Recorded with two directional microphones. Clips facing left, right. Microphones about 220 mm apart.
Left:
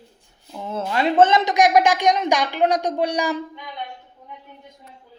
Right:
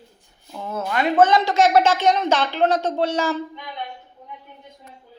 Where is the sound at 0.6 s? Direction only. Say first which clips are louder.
Left 1 dB; 25° left (ahead or behind).